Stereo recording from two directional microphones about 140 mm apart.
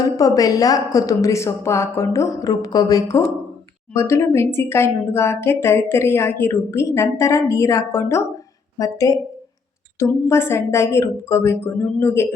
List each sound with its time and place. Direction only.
0.0 s a woman's voice: 25° left (ahead or behind)